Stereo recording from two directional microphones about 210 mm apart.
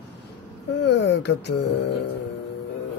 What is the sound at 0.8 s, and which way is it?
Speech, 55° left (ahead or behind).